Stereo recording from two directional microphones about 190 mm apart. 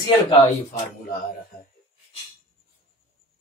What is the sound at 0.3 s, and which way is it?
Speech, 40° left (ahead or behind).